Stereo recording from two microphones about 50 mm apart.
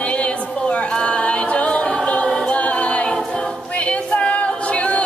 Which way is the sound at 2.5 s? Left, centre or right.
Left.